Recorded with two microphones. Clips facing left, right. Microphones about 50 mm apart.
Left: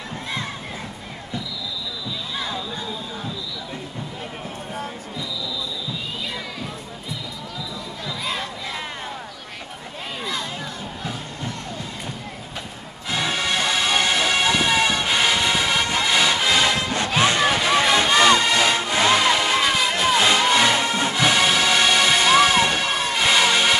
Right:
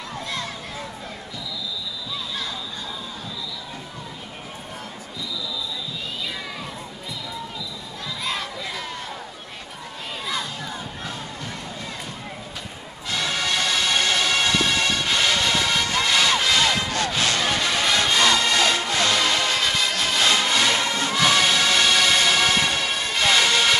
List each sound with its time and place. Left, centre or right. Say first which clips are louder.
13.1 s music: left 2 dB; centre